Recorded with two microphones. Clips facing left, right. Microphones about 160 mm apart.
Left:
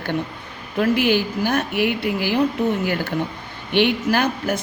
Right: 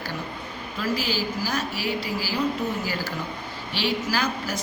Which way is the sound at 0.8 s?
60° left (ahead or behind).